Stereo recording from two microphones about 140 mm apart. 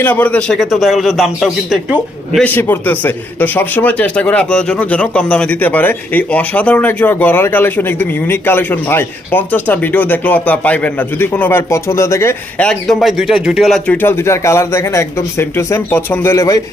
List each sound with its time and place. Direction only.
0.0 s a man's voice: 10° left (ahead or behind)
2.4 s a man's voice: 10° left (ahead or behind)
12.6 s a man's voice: centre (ahead or behind); by 16.6 s 20° left (ahead or behind)